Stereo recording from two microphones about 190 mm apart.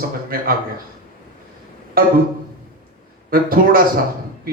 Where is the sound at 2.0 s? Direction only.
50° right (ahead or behind).